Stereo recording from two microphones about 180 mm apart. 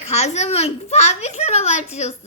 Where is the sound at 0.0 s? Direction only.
35° left (ahead or behind).